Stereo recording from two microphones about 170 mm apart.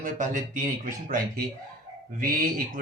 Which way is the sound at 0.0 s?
50° right (ahead or behind).